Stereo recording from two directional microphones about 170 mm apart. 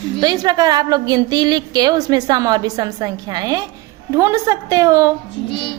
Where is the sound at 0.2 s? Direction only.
25° right (ahead or behind).